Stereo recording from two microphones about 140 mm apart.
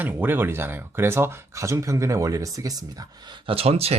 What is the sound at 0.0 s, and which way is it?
Speech, 15° right (ahead or behind).